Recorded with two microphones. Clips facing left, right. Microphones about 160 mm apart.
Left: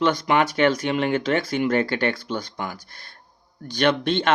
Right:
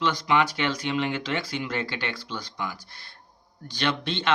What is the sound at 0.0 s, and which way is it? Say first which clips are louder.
Speech: left 4 dB; 50° left (ahead or behind).